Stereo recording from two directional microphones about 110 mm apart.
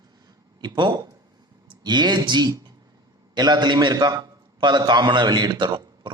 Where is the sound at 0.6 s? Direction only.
40° right (ahead or behind).